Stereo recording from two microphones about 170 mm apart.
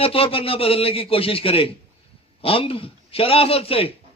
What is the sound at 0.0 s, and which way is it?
A man's voice, 35° left (ahead or behind).